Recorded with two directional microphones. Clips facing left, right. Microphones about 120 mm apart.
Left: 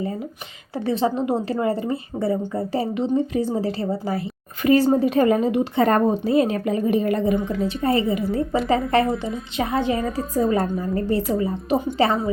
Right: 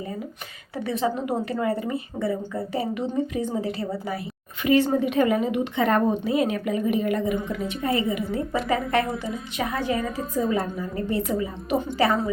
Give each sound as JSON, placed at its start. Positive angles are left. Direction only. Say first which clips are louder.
{"t": 0.7, "sound": "a woman's voice", "louder": "left 4 dB", "side_deg": 30}